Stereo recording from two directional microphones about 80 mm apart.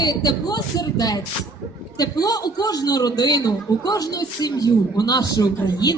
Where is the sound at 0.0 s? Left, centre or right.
Left.